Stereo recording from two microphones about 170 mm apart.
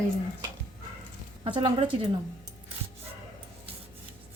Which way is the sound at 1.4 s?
30° right (ahead or behind).